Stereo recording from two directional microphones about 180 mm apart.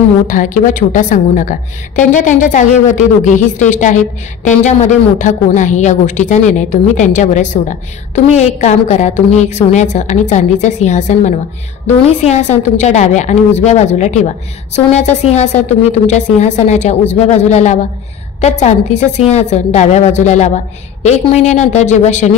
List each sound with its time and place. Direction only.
0.3 s a woman's voice: 45° left (ahead or behind)